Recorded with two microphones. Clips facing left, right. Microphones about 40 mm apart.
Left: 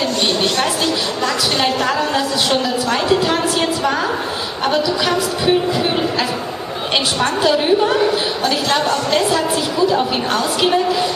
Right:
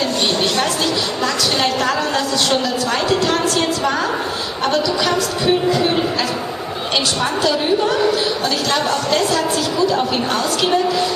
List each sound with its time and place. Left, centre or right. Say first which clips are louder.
1.2 s a woman's voice: left 1 dB; centre
7.4 s a woman's voice: left 3 dB; centre